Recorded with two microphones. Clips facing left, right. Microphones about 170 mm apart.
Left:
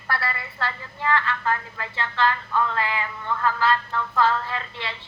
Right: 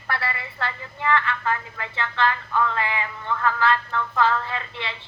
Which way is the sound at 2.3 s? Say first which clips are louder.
Even; 20° right (ahead or behind).